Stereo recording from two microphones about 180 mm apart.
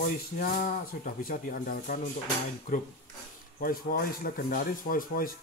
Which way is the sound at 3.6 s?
55° left (ahead or behind).